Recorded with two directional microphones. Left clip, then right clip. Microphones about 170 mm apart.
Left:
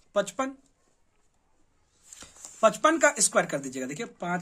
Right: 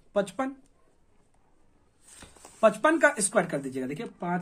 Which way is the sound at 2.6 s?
30° left (ahead or behind).